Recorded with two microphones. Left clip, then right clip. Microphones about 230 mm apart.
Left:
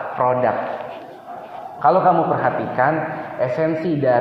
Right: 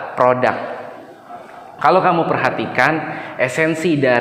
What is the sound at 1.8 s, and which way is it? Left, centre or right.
Speech, right.